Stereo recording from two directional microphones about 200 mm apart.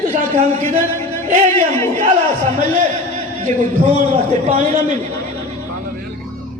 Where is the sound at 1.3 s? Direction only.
35° right (ahead or behind).